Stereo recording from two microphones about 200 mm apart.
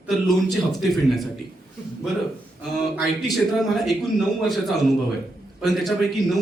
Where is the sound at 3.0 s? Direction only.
Centre (ahead or behind).